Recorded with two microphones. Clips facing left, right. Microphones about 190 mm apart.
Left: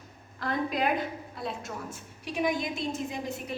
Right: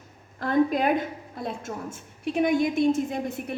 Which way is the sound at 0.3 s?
50° right (ahead or behind).